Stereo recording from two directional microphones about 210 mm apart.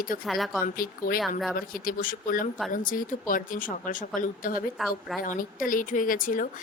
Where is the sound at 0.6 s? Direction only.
45° left (ahead or behind).